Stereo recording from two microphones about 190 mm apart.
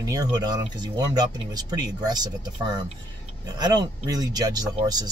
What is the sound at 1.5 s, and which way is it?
Speech, 20° right (ahead or behind).